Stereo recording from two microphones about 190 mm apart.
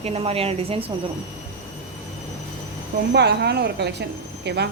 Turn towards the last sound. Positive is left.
turn(degrees=-60)  # may be behind; listen again after turning